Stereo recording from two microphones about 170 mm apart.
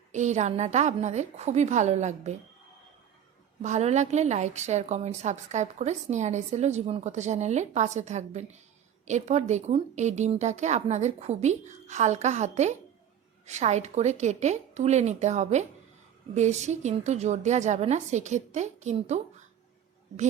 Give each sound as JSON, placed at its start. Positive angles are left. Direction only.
{"t": 0.1, "sound": "a woman's voice", "side_deg": -45}
{"t": 3.6, "sound": "a woman's voice", "side_deg": -40}